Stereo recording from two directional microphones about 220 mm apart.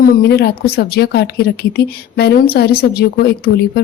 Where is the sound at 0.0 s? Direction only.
45° left (ahead or behind).